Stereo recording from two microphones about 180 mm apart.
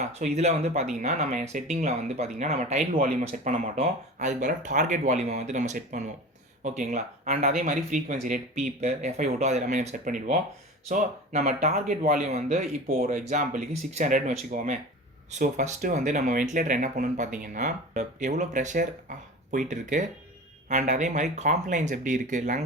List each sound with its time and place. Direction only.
0.0 s speech: 40° right (ahead or behind)